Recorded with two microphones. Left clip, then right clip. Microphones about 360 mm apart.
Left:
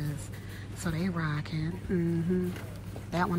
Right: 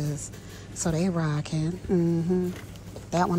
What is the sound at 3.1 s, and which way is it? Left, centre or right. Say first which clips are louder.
Speech: right 5 dB; centre.